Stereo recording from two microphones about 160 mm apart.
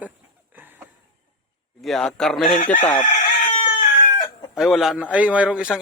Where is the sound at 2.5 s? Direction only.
55° left (ahead or behind).